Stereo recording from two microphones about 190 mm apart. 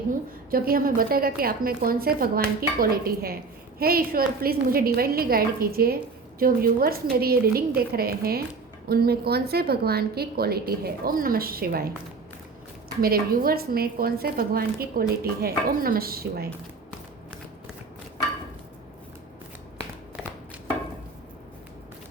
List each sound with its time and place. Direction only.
0.5 s speech: 50° right (ahead or behind)
13.0 s speech: 50° right (ahead or behind)